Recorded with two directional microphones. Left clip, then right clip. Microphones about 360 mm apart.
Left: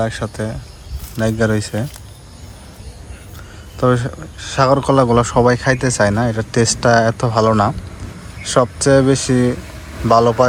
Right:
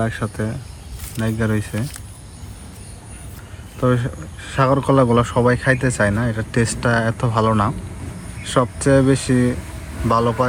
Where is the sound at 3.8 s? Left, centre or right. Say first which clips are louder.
Left 4 dB; centre.